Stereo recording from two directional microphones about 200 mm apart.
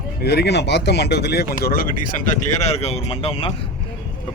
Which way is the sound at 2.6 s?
30° left (ahead or behind).